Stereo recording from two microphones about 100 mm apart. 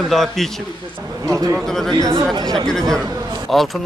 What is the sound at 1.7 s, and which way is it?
Speech, 5° left (ahead or behind).